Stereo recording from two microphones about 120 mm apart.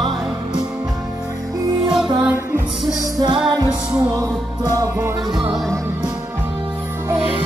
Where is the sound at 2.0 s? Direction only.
40° right (ahead or behind).